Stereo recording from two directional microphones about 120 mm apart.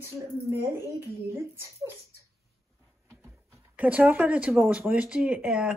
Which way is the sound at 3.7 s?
10° right (ahead or behind).